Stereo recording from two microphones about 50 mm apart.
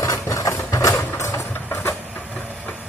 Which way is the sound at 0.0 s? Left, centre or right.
Left.